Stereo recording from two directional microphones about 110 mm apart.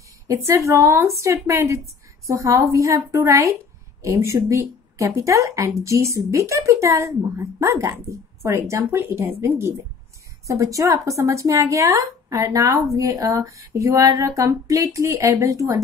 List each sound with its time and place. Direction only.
0.5 s speech: 25° right (ahead or behind)